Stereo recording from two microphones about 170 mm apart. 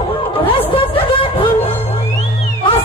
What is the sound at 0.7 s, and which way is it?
Music, 30° left (ahead or behind).